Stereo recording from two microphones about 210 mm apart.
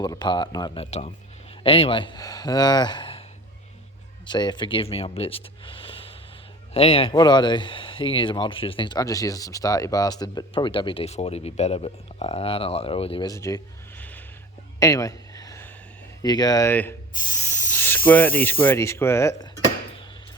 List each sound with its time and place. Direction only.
0.0 s speech: 20° left (ahead or behind)
4.3 s speech: 20° left (ahead or behind)
14.8 s a sound: 15° left (ahead or behind)
16.2 s speech: 20° left (ahead or behind)